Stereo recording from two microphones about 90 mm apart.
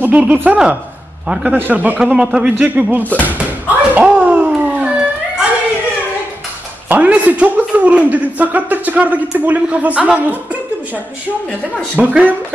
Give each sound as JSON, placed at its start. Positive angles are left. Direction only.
{"t": 0.2, "sound": "a man's voice", "side_deg": -15}
{"t": 1.5, "sound": "speech", "side_deg": -20}
{"t": 2.0, "sound": "speech", "side_deg": -5}
{"t": 3.3, "sound": "a sound", "side_deg": -20}
{"t": 6.9, "sound": "speech", "side_deg": -15}
{"t": 12.0, "sound": "speech", "side_deg": -15}